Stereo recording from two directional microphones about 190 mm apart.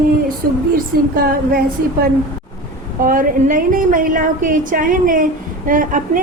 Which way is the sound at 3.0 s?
45° right (ahead or behind).